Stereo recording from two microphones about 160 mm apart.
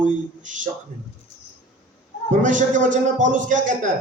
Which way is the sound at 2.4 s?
55° right (ahead or behind).